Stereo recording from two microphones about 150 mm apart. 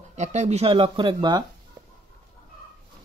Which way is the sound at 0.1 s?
50° right (ahead or behind).